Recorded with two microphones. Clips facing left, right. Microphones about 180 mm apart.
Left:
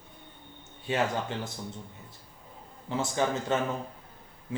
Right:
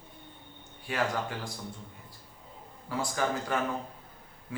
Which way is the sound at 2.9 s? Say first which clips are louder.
Left 2 dB; 25° left (ahead or behind).